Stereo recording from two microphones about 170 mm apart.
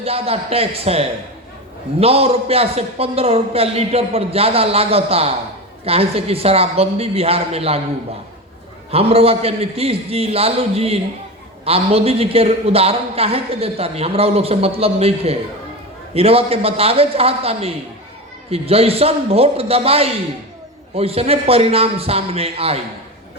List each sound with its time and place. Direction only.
0.0 s a man's voice: 35° right (ahead or behind)
8.9 s a man's voice: 35° right (ahead or behind)